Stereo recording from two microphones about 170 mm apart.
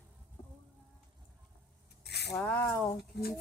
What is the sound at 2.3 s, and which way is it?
Speech, 10° left (ahead or behind).